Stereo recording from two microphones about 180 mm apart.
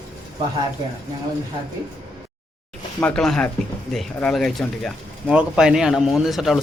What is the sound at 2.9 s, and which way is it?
Speech, 5° left (ahead or behind).